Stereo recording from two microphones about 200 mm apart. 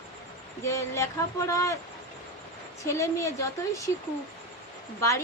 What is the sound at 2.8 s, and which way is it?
Speech, 15° left (ahead or behind).